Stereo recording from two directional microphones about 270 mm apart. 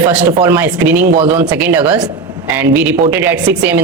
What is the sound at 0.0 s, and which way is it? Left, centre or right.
A woman's voice, centre.